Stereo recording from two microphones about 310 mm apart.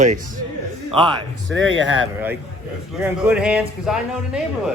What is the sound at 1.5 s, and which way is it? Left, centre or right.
Speech, right.